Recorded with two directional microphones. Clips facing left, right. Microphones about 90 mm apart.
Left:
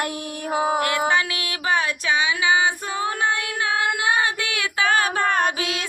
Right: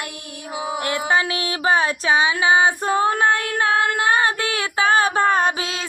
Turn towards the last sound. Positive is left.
turn(degrees=-35)  # may be behind; listen again after turning